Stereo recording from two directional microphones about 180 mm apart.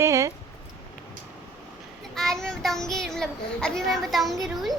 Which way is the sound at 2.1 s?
Centre (ahead or behind).